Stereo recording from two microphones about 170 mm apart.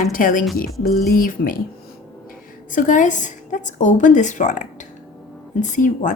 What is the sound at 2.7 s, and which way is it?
A woman's voice, 50° left (ahead or behind).